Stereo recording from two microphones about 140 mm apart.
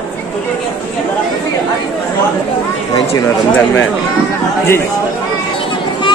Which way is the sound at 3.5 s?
15° left (ahead or behind).